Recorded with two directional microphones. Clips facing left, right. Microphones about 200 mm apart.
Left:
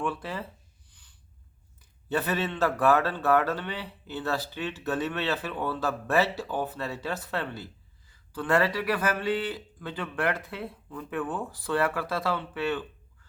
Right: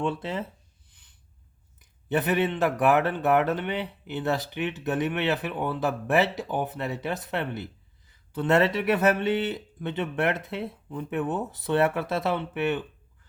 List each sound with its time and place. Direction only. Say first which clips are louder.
0.0 s speech: right 3 dB; 25° right (ahead or behind)
0.9 s snort: left 1 dB; 20° right (ahead or behind)
1.8 s speech: right 3 dB; 20° right (ahead or behind)